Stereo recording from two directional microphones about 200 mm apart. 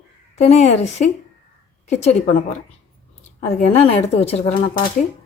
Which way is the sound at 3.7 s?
30° left (ahead or behind).